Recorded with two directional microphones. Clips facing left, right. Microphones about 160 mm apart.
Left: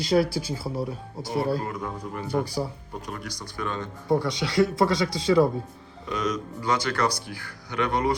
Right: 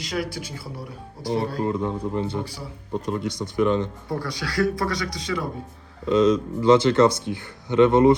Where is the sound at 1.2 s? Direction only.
25° right (ahead or behind).